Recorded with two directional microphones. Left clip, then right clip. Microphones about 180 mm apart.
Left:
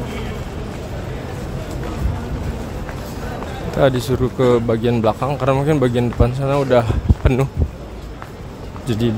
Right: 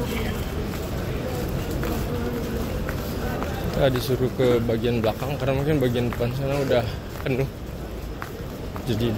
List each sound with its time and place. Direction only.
3.8 s speech: 40° left (ahead or behind)
8.8 s speech: 40° left (ahead or behind)